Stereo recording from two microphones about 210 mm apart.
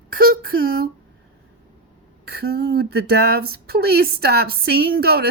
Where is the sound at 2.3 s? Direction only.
50° right (ahead or behind).